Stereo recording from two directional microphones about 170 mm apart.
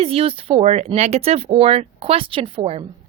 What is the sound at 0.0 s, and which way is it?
Speech, 35° right (ahead or behind).